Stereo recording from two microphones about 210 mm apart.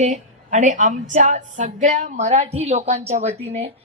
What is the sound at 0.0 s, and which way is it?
A woman's voice, 35° right (ahead or behind).